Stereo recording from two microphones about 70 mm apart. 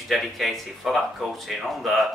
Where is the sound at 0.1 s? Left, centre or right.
Centre.